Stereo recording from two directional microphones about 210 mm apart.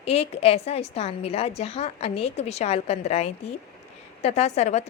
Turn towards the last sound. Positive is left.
turn(degrees=30)  # may be behind; listen again after turning